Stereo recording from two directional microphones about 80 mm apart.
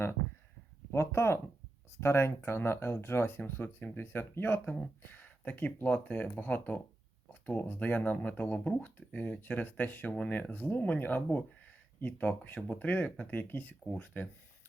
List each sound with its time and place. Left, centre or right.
0.9 s speech: left